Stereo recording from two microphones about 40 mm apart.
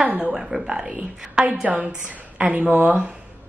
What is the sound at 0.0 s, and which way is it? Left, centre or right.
A woman's voice, right.